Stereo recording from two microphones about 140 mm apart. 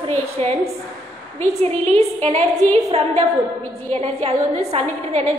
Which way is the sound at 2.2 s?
55° right (ahead or behind).